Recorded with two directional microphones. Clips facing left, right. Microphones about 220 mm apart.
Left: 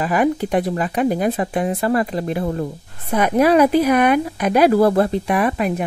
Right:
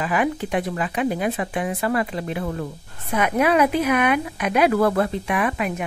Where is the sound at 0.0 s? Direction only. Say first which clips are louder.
Left 5 dB; 40° left (ahead or behind).